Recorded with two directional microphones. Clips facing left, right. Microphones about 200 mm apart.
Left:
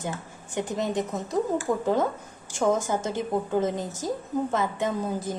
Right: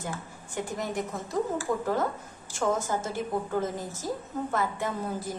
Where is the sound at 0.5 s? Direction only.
20° left (ahead or behind).